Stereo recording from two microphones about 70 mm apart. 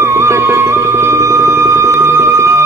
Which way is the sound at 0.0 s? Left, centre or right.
Right.